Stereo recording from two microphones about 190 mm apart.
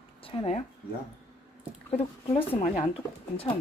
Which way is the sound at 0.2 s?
30° left (ahead or behind).